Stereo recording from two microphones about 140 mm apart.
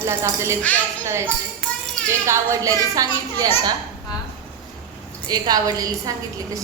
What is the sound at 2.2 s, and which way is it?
A woman's voice, 25° right (ahead or behind).